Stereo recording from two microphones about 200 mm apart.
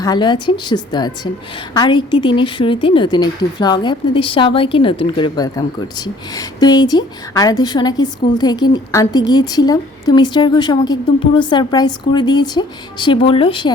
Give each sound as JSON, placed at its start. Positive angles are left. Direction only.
{"t": 0.0, "sound": "a woman's voice", "side_deg": 20}